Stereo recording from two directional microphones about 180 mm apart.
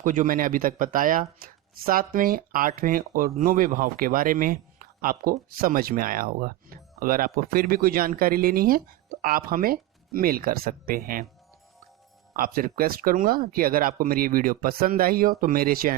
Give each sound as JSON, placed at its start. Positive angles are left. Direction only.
{"t": 0.0, "sound": "speech", "side_deg": -45}
{"t": 12.3, "sound": "speech", "side_deg": -50}